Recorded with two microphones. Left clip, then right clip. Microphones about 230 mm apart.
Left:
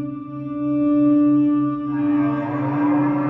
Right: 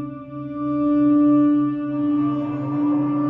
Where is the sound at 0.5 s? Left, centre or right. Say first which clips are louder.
Left 1 dB; centre.